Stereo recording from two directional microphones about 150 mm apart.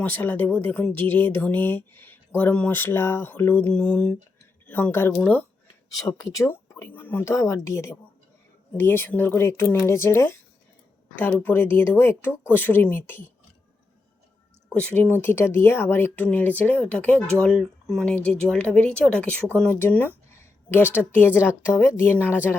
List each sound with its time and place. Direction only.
0.0 s speech: 10° left (ahead or behind)
6.0 s a woman's voice: 25° left (ahead or behind)
14.7 s speech: 5° left (ahead or behind)
19.7 s a sound: 15° left (ahead or behind)
20.8 s a woman's voice: 10° right (ahead or behind)
21.7 s speech: 15° left (ahead or behind)